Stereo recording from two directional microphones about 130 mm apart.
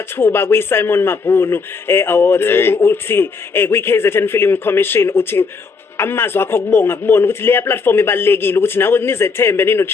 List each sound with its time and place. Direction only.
0.2 s a man's voice: 20° left (ahead or behind)